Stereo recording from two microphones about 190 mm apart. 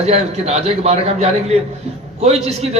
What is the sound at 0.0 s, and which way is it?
A man's voice, 35° right (ahead or behind).